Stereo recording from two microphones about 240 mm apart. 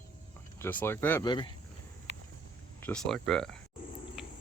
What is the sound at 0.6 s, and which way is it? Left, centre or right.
Speech, centre.